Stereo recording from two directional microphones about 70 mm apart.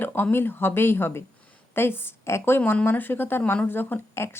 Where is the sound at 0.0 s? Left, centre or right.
Left.